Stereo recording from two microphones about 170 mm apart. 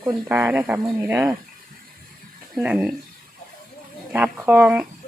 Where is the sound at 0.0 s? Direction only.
10° right (ahead or behind).